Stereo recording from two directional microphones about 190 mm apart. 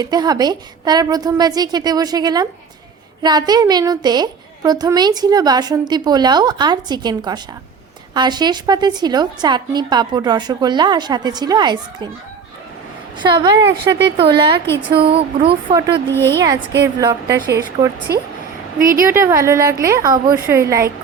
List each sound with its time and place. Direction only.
0.0 s a woman's voice: 20° right (ahead or behind)
13.1 s a woman's voice: 25° right (ahead or behind)
18.8 s a woman's voice: 45° right (ahead or behind)
19.0 s a woman's voice: 15° right (ahead or behind)